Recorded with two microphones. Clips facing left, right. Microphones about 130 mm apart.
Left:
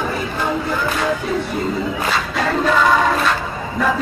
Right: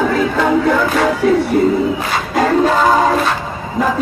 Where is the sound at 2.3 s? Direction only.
45° right (ahead or behind).